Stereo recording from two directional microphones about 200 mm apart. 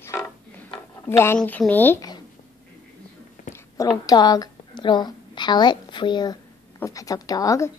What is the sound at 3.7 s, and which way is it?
A woman's voice, 20° left (ahead or behind).